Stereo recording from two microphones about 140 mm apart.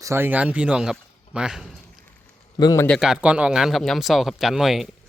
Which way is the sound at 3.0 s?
5° right (ahead or behind).